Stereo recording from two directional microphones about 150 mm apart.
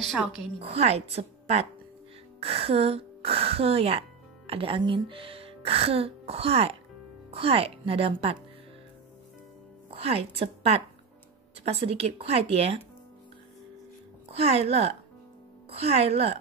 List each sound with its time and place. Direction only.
0.0 s a woman's voice: centre (ahead or behind)
0.6 s a woman's voice: 40° right (ahead or behind)
9.8 s a woman's voice: 40° right (ahead or behind)
14.3 s a woman's voice: 40° right (ahead or behind)